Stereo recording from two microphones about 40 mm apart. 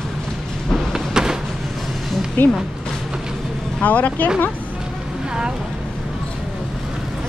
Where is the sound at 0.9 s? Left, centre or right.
Centre.